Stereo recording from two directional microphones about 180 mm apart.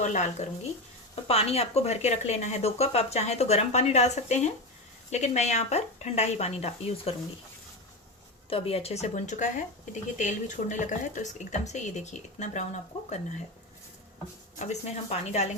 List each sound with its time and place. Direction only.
0.0 s speech: 40° left (ahead or behind)
8.4 s speech: 30° left (ahead or behind)
14.5 s speech: 40° left (ahead or behind)